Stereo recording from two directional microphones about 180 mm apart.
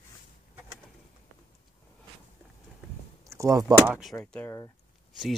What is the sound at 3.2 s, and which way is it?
Speech, 15° right (ahead or behind).